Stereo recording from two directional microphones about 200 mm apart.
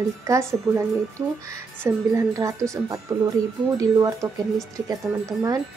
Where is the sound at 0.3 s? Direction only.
15° right (ahead or behind).